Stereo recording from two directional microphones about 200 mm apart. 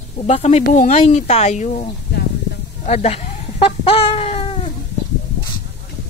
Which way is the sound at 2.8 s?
35° left (ahead or behind).